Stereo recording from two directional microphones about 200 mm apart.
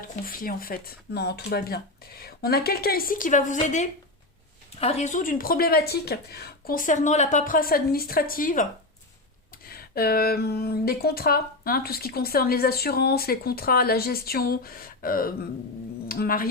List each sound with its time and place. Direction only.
0.3 s speech: 45° left (ahead or behind)
9.6 s speech: 50° left (ahead or behind)